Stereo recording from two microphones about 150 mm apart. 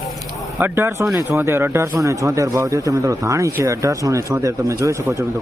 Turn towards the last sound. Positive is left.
turn(degrees=-20)  # may be behind; listen again after turning